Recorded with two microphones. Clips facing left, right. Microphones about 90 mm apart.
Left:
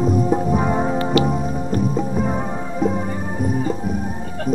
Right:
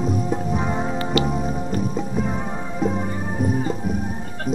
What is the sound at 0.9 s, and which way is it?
Music, 40° left (ahead or behind).